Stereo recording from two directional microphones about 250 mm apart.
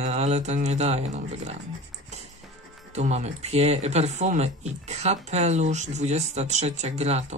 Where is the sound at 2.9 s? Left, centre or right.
Right.